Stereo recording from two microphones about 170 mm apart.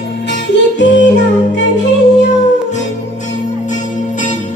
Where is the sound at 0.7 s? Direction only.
90° left.